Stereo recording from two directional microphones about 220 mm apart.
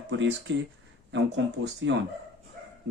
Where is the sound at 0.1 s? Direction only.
55° right (ahead or behind).